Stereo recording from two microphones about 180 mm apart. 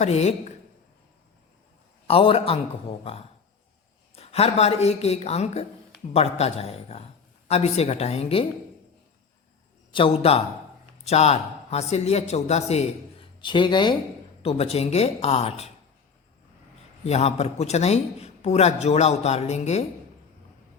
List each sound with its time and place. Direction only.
0.0 s a man's voice: 40° left (ahead or behind)
2.0 s a man's voice: 30° left (ahead or behind)
9.9 s a man's voice: 30° left (ahead or behind)
13.4 s a man's voice: 25° left (ahead or behind)
17.1 s a man's voice: 35° left (ahead or behind)